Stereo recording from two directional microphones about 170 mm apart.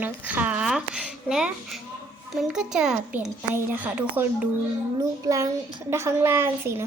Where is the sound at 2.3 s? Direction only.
Centre (ahead or behind).